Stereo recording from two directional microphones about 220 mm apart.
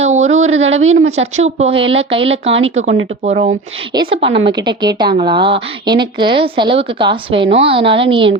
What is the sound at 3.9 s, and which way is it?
A woman's voice, 25° right (ahead or behind).